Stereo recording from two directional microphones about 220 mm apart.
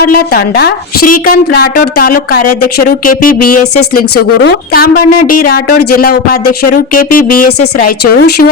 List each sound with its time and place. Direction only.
0.0 s a woman's voice: 45° left (ahead or behind)